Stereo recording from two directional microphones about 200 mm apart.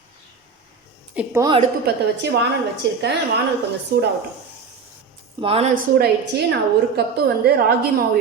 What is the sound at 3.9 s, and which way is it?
Speech, 55° right (ahead or behind).